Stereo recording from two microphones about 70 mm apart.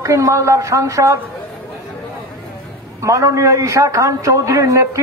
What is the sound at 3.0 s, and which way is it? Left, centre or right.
A man's voice, right.